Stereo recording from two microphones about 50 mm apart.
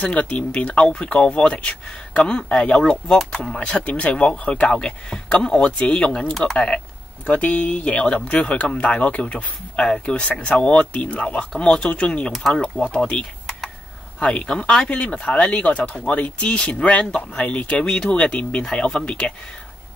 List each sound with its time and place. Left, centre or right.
0.0 s speech: left
7.2 s speech: left
17.8 s speech: centre